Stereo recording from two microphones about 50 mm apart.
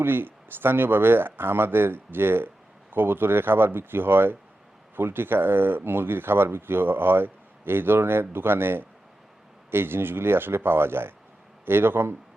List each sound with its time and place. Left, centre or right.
0.0 s speech: right